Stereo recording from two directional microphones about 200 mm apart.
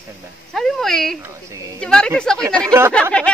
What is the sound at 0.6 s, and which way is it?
Speech, centre (ahead or behind).